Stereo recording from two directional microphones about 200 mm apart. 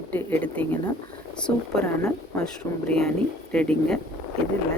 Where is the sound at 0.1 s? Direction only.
10° left (ahead or behind).